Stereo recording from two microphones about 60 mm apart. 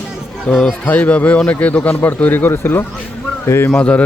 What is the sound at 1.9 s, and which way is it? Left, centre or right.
A man's voice, left.